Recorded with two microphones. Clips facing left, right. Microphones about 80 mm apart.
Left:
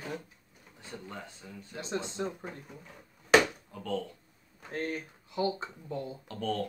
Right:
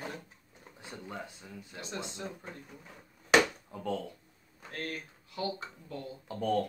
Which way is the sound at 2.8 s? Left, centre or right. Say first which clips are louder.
Left 1 dB; centre.